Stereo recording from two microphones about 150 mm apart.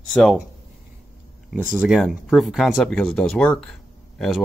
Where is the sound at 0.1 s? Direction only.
Centre (ahead or behind).